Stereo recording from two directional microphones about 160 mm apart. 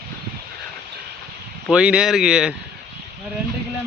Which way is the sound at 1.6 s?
5° right (ahead or behind).